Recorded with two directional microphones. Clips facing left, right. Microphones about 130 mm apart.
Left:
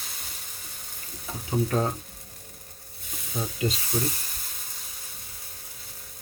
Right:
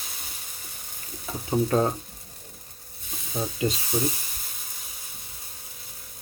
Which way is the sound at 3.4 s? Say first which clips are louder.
Right 2 dB; 25° right (ahead or behind).